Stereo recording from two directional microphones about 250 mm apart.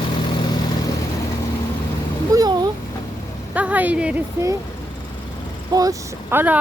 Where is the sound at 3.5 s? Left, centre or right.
Centre.